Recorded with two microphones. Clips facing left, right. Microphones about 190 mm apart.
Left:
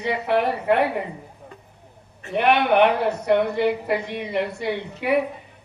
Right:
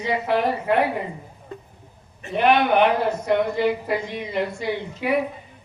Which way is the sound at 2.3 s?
65° left (ahead or behind).